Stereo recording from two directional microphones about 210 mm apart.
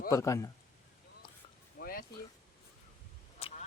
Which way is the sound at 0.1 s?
15° left (ahead or behind).